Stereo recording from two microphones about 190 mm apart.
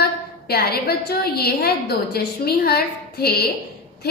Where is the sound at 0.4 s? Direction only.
55° left (ahead or behind).